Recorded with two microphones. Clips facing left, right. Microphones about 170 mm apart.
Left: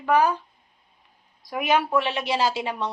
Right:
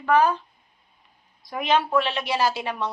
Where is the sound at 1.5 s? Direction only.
10° left (ahead or behind).